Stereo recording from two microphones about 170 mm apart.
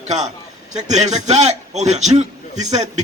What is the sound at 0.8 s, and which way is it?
A man's voice, 40° right (ahead or behind).